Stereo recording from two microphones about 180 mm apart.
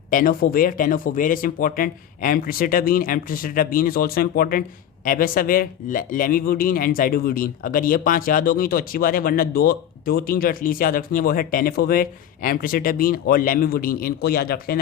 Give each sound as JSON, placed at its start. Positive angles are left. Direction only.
{"t": 0.1, "sound": "a man's voice", "side_deg": 50}